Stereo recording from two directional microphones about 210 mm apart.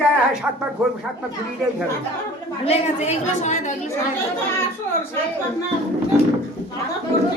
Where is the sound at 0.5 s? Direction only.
10° right (ahead or behind).